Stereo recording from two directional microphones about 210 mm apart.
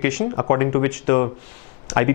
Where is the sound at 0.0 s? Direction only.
15° left (ahead or behind).